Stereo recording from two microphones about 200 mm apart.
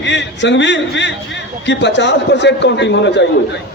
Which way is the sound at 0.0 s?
65° left (ahead or behind).